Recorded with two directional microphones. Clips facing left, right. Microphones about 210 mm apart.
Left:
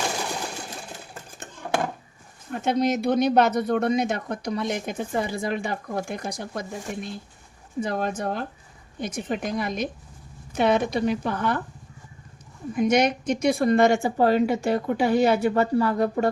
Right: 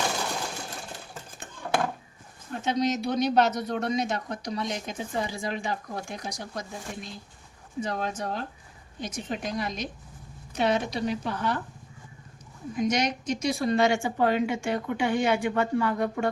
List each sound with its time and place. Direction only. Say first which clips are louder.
2.5 s speech: left 4 dB; 55° left (ahead or behind)
12.7 s a woman's voice: left 6 dB; 55° left (ahead or behind); by 16.3 s 35° left (ahead or behind)